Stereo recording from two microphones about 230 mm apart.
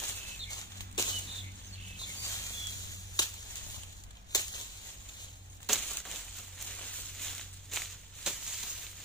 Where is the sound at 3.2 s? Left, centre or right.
Centre.